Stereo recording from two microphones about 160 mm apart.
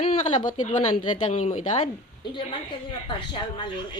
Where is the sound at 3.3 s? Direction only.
30° left (ahead or behind).